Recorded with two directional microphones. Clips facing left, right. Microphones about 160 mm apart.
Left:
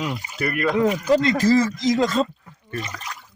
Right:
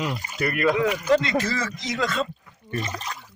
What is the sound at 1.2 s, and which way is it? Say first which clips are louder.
Speech: left 8 dB; 40° left (ahead or behind).